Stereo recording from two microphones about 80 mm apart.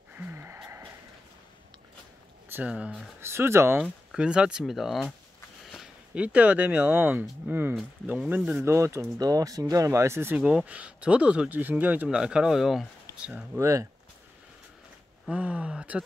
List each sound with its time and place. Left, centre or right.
0.1 s a sound: right
2.5 s speech: centre
3.2 s speech: right
4.1 s speech: centre
6.1 s speech: centre
8.6 s speech: right
9.2 s speech: right
10.3 s speech: centre
12.2 s speech: centre
13.6 s speech: right
15.2 s speech: centre